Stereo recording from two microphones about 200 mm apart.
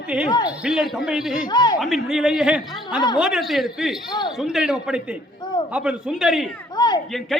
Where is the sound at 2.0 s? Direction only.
Centre (ahead or behind).